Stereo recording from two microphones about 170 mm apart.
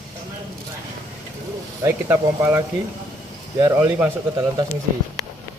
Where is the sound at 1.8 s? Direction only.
15° right (ahead or behind).